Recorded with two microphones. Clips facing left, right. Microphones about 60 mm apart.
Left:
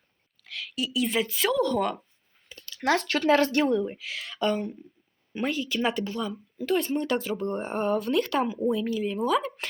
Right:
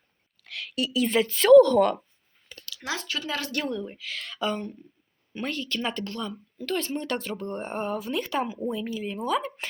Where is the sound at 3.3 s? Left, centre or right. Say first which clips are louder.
Left 12 dB; left.